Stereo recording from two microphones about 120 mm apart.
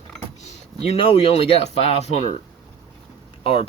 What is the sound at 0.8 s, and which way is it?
Speech, 50° left (ahead or behind).